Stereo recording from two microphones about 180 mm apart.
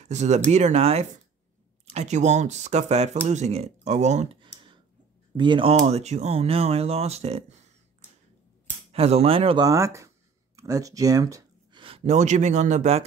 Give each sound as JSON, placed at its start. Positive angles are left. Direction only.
{"t": 0.0, "sound": "speech", "side_deg": -40}
{"t": 8.9, "sound": "speech", "side_deg": -35}
{"t": 9.7, "sound": "speech", "side_deg": -15}